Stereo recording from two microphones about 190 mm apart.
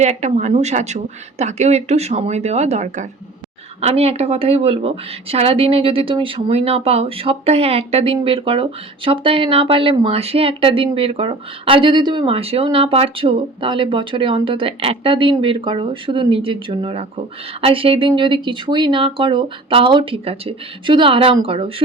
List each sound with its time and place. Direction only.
0.0 s speech: 35° right (ahead or behind)